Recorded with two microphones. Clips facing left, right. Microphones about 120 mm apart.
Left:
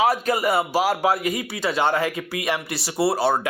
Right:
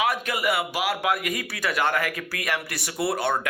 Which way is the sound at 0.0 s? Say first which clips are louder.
Left 5 dB; 40° left (ahead or behind).